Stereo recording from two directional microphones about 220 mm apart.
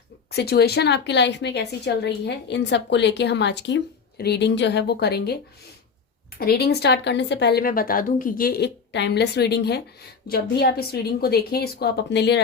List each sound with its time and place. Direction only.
0.3 s a woman's voice: 45° left (ahead or behind)